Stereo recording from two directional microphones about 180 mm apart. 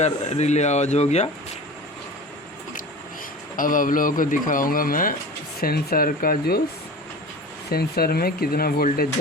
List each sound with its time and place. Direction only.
0.0 s speech: 40° left (ahead or behind)
3.6 s speech: 50° left (ahead or behind)
7.7 s speech: 60° left (ahead or behind)